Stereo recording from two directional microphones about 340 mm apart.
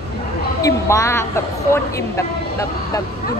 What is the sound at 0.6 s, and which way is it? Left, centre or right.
A woman's voice, centre.